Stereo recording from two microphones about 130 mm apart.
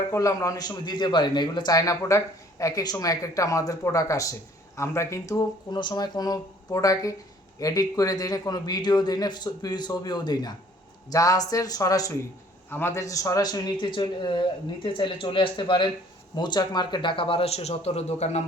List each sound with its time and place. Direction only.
0.1 s a man's voice: 25° left (ahead or behind); by 18.4 s 55° left (ahead or behind)